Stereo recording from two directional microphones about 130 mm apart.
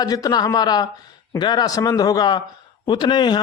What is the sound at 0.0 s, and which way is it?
Speech, 30° left (ahead or behind).